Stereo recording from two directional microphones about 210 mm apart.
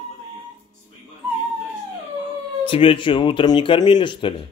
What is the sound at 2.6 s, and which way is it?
Speech, 25° left (ahead or behind).